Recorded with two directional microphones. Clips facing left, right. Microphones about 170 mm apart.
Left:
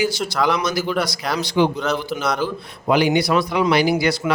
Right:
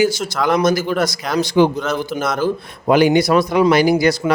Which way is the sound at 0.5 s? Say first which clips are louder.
Right 5 dB; 50° right (ahead or behind).